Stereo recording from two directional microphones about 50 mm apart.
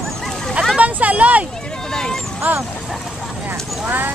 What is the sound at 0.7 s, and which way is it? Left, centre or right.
Vehicle, right.